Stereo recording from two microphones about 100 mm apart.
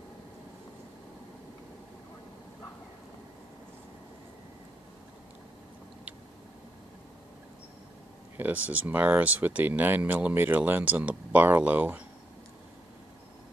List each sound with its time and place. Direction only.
8.4 s speech: 15° right (ahead or behind)